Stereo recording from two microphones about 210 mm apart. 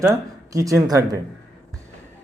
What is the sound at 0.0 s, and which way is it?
Speech, 15° right (ahead or behind).